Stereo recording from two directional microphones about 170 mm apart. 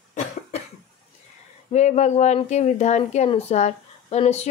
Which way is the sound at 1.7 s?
45° left (ahead or behind).